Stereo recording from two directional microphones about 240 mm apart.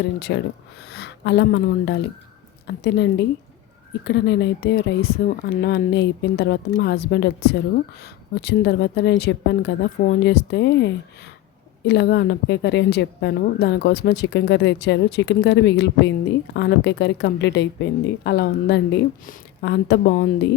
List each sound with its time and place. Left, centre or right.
0.3 s a woman's voice: left